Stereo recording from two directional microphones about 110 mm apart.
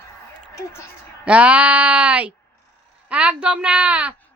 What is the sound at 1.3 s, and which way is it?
A woman's voice, 15° right (ahead or behind).